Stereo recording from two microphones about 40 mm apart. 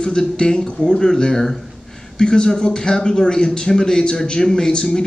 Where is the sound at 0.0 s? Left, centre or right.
Centre.